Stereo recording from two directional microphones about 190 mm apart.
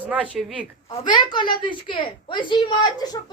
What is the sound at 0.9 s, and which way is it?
A woman's voice, 25° left (ahead or behind).